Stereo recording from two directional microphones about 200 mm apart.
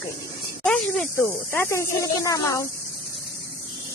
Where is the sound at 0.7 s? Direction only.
Centre (ahead or behind).